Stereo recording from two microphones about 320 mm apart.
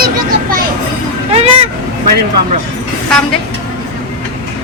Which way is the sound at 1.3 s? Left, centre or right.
Centre.